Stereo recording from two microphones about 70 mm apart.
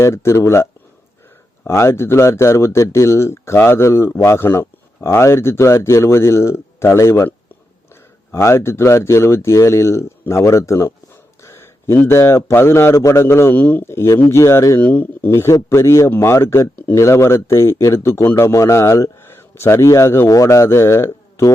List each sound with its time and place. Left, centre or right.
0.0 s speech: left
8.3 s speech: left
11.4 s a sound: left
12.0 s speech: left
14.8 s speech: left
15.3 s speech: left